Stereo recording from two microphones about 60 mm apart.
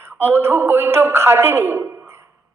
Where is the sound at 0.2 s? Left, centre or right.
Right.